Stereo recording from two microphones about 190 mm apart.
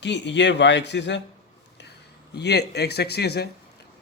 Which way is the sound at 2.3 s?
60° left (ahead or behind).